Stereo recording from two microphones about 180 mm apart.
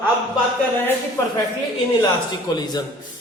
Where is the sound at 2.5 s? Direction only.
25° left (ahead or behind).